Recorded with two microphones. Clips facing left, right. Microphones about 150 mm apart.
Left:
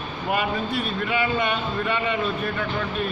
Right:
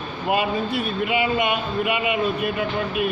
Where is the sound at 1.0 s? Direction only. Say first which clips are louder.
Right 2 dB; 20° right (ahead or behind).